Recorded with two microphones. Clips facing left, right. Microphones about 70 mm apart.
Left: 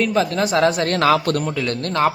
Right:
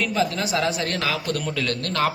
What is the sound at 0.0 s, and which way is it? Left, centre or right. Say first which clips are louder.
A man's voice: left 5 dB; left.